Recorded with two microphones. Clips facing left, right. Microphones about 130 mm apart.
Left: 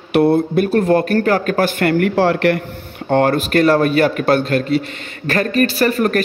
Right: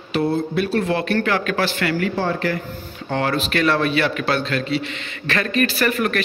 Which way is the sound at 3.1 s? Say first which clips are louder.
Left 7 dB; 50° left (ahead or behind).